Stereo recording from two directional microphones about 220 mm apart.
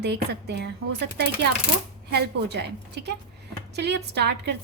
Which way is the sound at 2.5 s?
50° right (ahead or behind).